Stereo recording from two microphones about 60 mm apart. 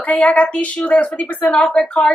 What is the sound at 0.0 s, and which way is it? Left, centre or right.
A woman's voice, left.